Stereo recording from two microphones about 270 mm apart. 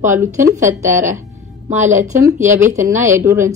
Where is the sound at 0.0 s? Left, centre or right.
Centre.